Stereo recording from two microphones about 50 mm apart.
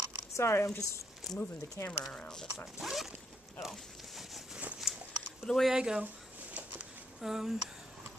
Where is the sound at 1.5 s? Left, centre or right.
Left.